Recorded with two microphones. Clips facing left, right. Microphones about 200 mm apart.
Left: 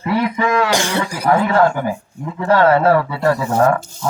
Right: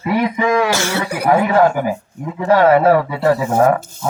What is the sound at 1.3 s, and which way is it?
A man's voice, 20° right (ahead or behind).